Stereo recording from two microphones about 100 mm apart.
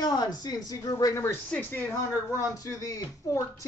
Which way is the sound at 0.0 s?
40° left (ahead or behind).